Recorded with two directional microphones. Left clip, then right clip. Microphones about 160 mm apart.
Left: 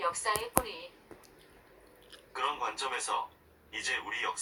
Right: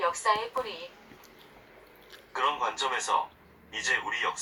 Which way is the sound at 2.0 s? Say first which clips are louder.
Right 5 dB; 10° left (ahead or behind).